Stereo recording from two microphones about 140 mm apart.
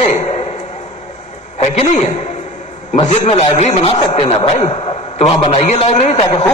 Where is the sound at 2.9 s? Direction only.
50° left (ahead or behind).